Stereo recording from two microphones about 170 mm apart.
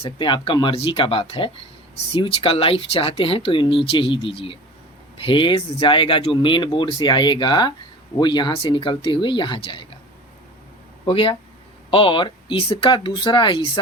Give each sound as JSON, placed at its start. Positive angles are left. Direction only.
{"t": 0.0, "sound": "speech", "side_deg": 30}
{"t": 11.0, "sound": "speech", "side_deg": 30}